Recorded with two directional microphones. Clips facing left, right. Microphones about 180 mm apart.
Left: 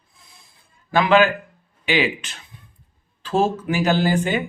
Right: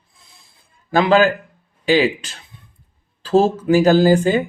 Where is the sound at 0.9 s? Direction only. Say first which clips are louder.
Right 2 dB; 35° right (ahead or behind).